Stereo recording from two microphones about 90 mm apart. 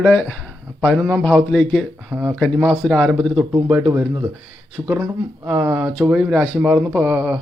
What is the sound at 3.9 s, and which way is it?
Speech, 30° right (ahead or behind).